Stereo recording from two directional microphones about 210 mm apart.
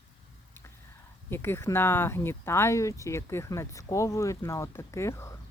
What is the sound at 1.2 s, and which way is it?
Speech, 10° left (ahead or behind).